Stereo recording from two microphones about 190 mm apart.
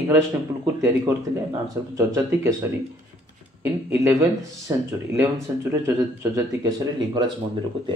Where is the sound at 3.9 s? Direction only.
15° right (ahead or behind).